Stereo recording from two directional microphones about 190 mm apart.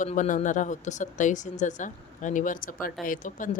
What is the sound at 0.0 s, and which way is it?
Speech, 40° left (ahead or behind).